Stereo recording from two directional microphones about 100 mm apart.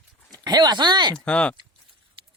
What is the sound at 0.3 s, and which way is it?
Speech, 45° right (ahead or behind).